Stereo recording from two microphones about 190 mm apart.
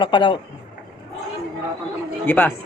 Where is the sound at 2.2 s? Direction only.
10° left (ahead or behind).